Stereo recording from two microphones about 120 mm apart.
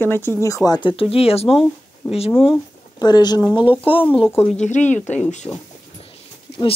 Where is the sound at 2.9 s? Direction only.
35° left (ahead or behind).